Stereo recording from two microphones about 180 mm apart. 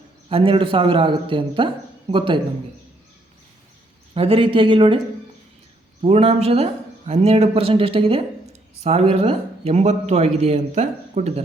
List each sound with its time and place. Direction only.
0.3 s a man's voice: 30° right (ahead or behind)
4.1 s a man's voice: 30° right (ahead or behind)
6.0 s speech: 35° right (ahead or behind)